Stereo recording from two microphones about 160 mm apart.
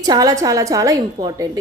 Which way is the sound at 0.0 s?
20° right (ahead or behind).